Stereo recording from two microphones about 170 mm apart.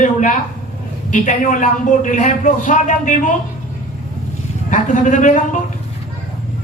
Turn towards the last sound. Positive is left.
turn(degrees=45)  # may be behind; listen again after turning